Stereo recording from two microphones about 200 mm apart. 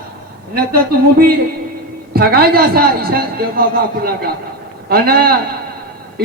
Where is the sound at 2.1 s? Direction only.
50° right (ahead or behind).